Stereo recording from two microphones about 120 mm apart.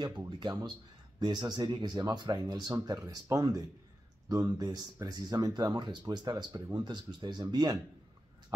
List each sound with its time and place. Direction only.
0.4 s speech: 35° right (ahead or behind)